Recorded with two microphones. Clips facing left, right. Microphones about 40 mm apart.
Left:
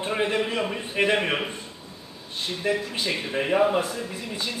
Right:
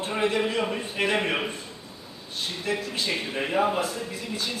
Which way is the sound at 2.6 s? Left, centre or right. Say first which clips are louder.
Left 3 dB; left.